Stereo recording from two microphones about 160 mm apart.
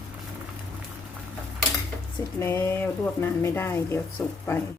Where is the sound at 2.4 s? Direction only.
15° left (ahead or behind).